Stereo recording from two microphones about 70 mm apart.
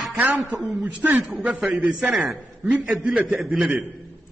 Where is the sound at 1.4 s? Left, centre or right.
Centre.